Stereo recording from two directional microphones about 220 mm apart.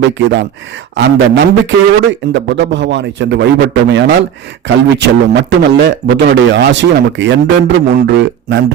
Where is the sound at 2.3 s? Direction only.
55° right (ahead or behind).